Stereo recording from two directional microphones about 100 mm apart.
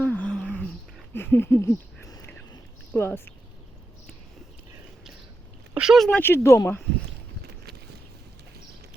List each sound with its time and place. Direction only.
0.0 s a sound: 15° left (ahead or behind)
2.9 s speech: 20° left (ahead or behind)
5.7 s speech: 5° right (ahead or behind)
6.1 s speech: 20° left (ahead or behind)